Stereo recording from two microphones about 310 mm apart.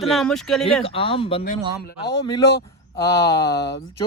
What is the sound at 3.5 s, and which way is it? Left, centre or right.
Speech, left.